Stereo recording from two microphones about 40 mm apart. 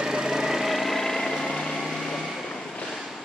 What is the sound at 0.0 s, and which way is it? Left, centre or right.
Vehicle, centre.